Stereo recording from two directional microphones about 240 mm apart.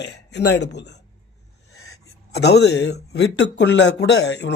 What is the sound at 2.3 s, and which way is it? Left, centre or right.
Speech, left.